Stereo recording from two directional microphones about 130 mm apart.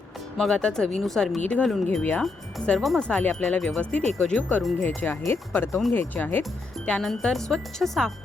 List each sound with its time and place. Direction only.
0.3 s speech: 5° left (ahead or behind)